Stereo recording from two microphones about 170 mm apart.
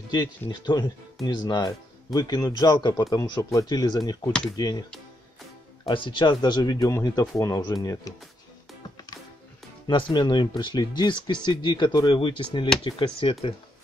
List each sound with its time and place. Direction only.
0.1 s speech: 25° left (ahead or behind)
5.9 s speech: 30° left (ahead or behind)
9.8 s speech: 25° left (ahead or behind)